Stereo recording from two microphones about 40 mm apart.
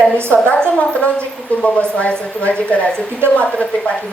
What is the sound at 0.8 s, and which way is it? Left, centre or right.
Speech, left.